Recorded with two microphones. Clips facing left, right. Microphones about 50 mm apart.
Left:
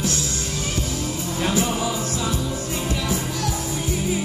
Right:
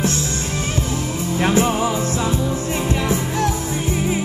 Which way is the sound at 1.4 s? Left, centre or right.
Right.